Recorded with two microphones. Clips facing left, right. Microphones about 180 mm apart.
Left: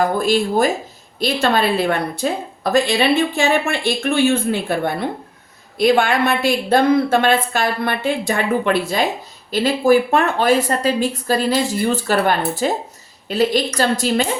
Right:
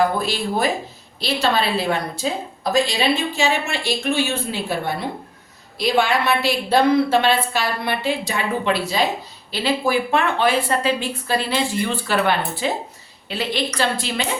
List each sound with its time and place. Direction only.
0.2 s a woman's voice: 50° left (ahead or behind)